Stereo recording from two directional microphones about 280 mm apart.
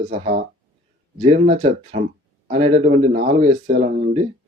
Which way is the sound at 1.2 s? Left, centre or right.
Right.